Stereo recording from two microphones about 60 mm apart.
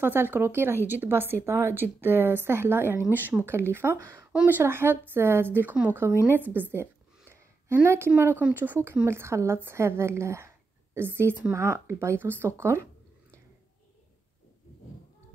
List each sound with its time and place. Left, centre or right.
0.0 s a woman's voice: right
3.1 s a woman's voice: right
6.3 s a sound: right
8.2 s a woman's voice: right
9.0 s a woman's voice: right
11.5 s a woman's voice: right
12.2 s a woman's voice: right